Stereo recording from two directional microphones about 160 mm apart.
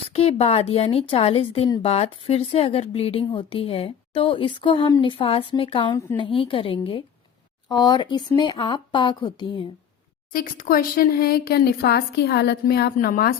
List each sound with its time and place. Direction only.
0.1 s speech: 40° left (ahead or behind)
10.3 s speech: 60° left (ahead or behind)